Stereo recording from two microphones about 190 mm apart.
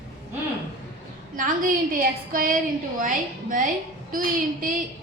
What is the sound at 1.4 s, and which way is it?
A woman's voice, 45° right (ahead or behind).